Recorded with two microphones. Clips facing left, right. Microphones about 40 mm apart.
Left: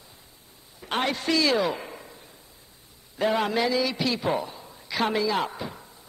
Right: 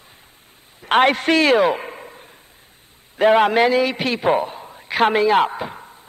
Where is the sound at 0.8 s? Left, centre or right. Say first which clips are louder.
Right 11 dB; right.